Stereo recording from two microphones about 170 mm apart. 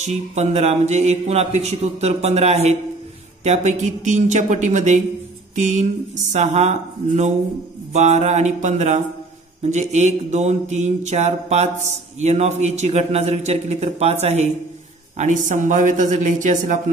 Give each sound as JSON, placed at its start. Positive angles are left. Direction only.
{"t": 0.0, "sound": "mantra", "side_deg": -40}
{"t": 3.4, "sound": "speech", "side_deg": -45}
{"t": 9.6, "sound": "mantra", "side_deg": -40}
{"t": 15.1, "sound": "speech", "side_deg": -45}